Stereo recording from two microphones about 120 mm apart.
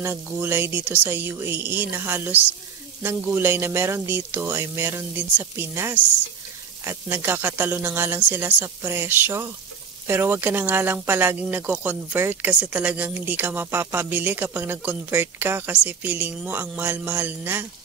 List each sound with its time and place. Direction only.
0.0 s speech: 20° right (ahead or behind)